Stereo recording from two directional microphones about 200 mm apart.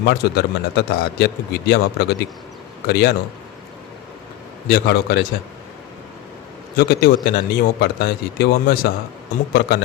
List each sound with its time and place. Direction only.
0.0 s speech: 55° left (ahead or behind)
4.7 s speech: 55° left (ahead or behind)
6.7 s speech: 50° left (ahead or behind)